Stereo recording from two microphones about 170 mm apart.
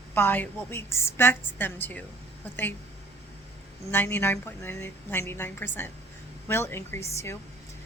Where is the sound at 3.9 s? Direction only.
10° left (ahead or behind).